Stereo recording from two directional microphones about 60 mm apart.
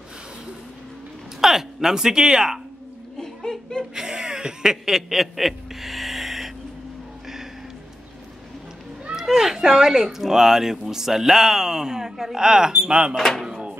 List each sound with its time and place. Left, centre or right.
1.4 s speech: centre
3.2 s laughter: centre
3.9 s a sound: centre
9.1 s speech: centre
13.1 s speech: centre
13.5 s a sound: centre